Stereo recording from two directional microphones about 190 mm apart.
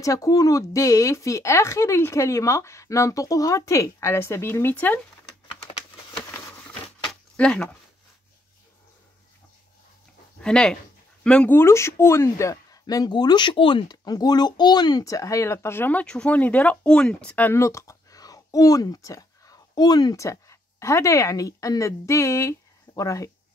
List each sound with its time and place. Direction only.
0.0 s speech: 15° left (ahead or behind)
6.3 s a sound: 5° left (ahead or behind)
10.4 s speech: 5° left (ahead or behind)